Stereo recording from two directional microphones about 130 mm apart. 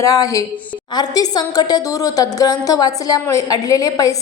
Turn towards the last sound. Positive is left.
turn(degrees=30)  # may be behind; listen again after turning